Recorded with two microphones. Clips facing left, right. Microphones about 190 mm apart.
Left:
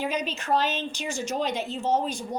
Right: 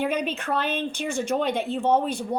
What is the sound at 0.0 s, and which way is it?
A woman's voice, 55° right (ahead or behind).